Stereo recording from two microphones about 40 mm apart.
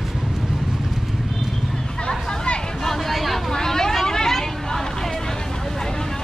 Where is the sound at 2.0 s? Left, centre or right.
Left.